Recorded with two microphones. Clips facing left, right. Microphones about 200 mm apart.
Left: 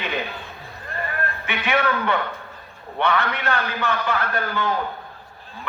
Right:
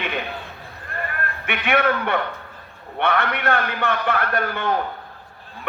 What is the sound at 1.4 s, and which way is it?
A man's voice, 60° right (ahead or behind).